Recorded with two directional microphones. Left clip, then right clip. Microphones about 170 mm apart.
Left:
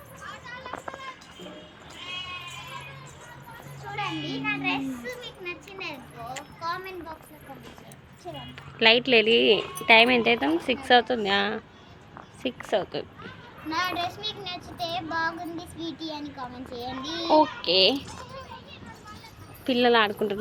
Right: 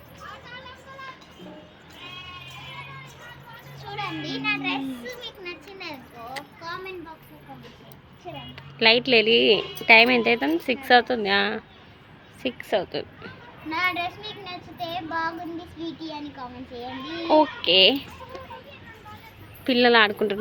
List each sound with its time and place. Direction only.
3.8 s children playing: 15° left (ahead or behind)
4.4 s children playing: 5° right (ahead or behind)
5.0 s children playing: 25° right (ahead or behind)
8.8 s a child's voice: 5° right (ahead or behind)
13.7 s a child's voice: centre (ahead or behind)
17.2 s speech: 15° right (ahead or behind)
19.6 s speech: 10° right (ahead or behind)